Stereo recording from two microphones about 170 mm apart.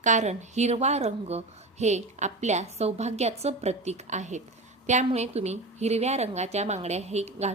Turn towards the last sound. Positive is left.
turn(degrees=-40)  # may be behind; listen again after turning